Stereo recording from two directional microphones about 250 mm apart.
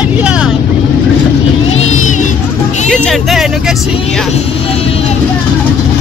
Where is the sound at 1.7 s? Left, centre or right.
Left.